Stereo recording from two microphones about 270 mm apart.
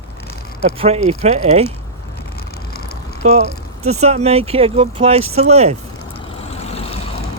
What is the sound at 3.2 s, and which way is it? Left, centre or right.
Speech, right.